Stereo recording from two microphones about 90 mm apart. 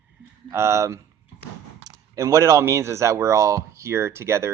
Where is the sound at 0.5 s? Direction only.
30° right (ahead or behind).